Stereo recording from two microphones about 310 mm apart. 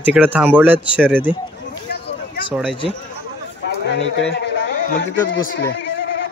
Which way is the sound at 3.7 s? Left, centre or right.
Left.